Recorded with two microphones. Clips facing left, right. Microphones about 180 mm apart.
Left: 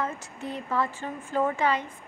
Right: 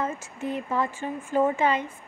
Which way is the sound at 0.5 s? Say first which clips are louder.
Right 2 dB; 15° right (ahead or behind).